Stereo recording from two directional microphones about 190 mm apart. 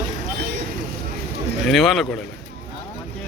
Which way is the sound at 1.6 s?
Centre (ahead or behind).